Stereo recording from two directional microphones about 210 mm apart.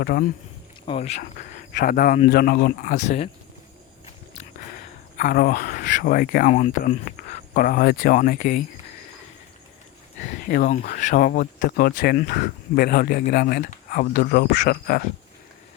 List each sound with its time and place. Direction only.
0.0 s speech: 45° left (ahead or behind)
0.9 s a man's voice: 30° left (ahead or behind)
10.2 s speech: 35° left (ahead or behind)